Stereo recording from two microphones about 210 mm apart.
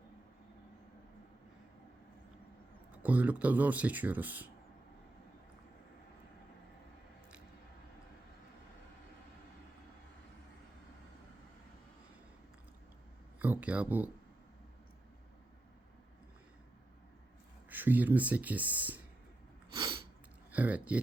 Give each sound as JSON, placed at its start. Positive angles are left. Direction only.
{"t": 3.0, "sound": "speech", "side_deg": -5}
{"t": 13.4, "sound": "speech", "side_deg": -5}
{"t": 17.7, "sound": "speech", "side_deg": -10}
{"t": 19.7, "sound": "sneeze", "side_deg": -20}
{"t": 20.5, "sound": "speech", "side_deg": -10}